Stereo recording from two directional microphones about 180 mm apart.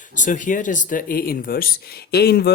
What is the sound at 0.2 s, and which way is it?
Speech, 45° left (ahead or behind).